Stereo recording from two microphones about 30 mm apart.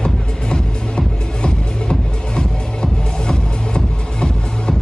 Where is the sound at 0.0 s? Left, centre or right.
Left.